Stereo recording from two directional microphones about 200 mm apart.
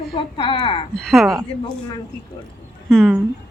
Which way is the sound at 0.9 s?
Centre (ahead or behind).